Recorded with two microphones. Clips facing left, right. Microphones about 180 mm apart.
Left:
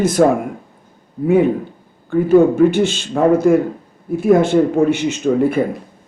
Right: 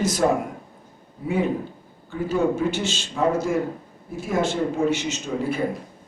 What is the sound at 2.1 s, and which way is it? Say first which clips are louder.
Speech: left 11 dB; 55° left (ahead or behind).